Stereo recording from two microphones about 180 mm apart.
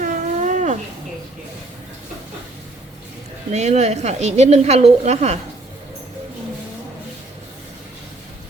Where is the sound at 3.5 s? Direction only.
40° right (ahead or behind).